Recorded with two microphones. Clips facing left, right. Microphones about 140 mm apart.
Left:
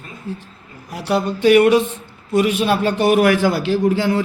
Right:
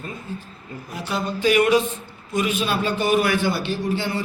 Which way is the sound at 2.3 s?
65° left (ahead or behind).